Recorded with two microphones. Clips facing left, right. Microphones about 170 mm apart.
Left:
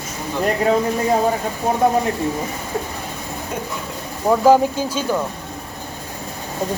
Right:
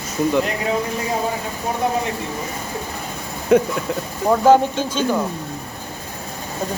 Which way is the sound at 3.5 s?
75° right (ahead or behind).